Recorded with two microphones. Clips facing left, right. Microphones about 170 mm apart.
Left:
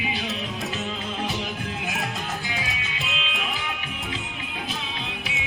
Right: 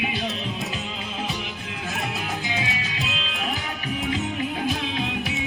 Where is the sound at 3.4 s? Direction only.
40° right (ahead or behind).